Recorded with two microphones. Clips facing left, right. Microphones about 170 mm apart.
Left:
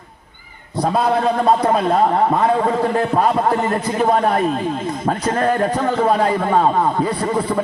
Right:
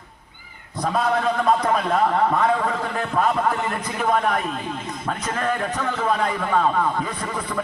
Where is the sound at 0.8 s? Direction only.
30° left (ahead or behind).